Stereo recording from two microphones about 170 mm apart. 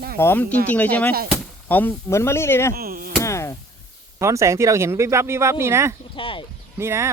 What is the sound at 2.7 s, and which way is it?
Speech, 60° right (ahead or behind).